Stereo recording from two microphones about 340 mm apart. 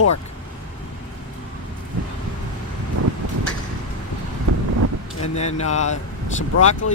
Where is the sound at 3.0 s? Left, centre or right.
Right.